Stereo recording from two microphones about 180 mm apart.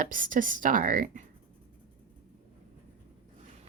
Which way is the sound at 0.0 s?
50° right (ahead or behind).